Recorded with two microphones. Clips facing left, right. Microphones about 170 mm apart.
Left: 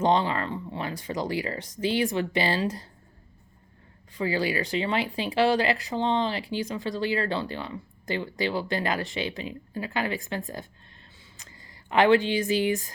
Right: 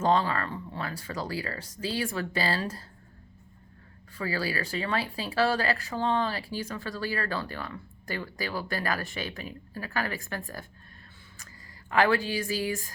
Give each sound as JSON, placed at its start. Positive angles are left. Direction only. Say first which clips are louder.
{"t": 0.0, "sound": "speech", "louder": "left 2 dB", "side_deg": 20}
{"t": 4.2, "sound": "speech", "louder": "left 5 dB", "side_deg": 20}
{"t": 11.9, "sound": "speech", "louder": "left 5 dB", "side_deg": 25}